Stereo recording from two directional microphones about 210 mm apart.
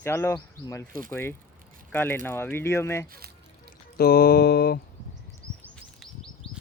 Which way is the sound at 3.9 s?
45° left (ahead or behind).